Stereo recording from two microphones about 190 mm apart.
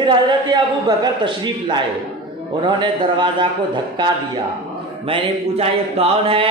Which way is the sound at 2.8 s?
25° right (ahead or behind).